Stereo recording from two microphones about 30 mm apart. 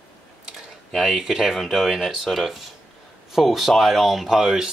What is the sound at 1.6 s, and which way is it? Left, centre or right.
Speech, centre.